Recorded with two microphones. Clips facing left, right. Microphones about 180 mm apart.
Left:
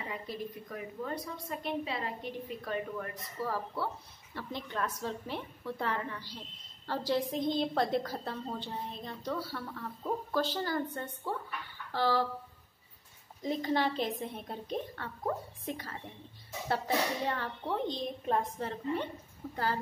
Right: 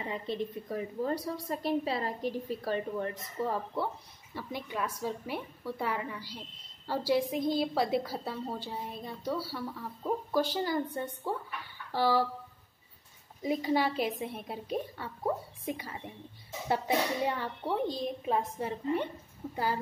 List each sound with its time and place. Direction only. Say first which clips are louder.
0.1 s a woman's voice: right 7 dB; 25° right (ahead or behind); by 12.3 s 10° right (ahead or behind)
13.4 s a woman's voice: right 2 dB; 10° right (ahead or behind)